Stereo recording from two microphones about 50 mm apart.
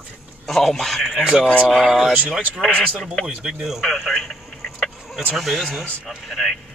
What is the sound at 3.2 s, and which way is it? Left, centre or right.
Speech, centre.